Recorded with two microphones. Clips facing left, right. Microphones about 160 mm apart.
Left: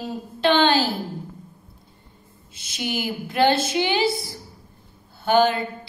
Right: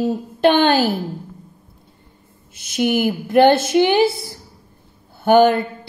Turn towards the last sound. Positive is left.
turn(degrees=-55)  # may be behind; listen again after turning